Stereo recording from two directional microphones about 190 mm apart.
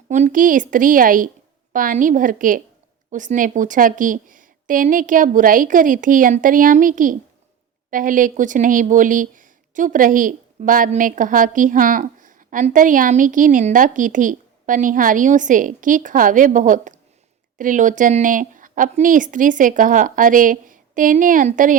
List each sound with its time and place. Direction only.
0.1 s speech: 40° right (ahead or behind)